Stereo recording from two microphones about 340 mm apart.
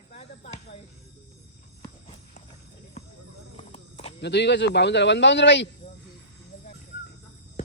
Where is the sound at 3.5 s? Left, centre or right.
Centre.